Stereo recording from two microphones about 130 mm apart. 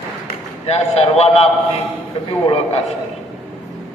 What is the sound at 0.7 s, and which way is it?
Speech, 55° left (ahead or behind).